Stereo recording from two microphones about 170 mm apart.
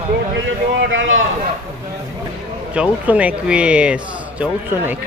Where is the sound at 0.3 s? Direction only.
90° right.